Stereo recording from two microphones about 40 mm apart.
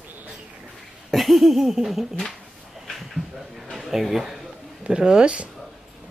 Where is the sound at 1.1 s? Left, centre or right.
Centre.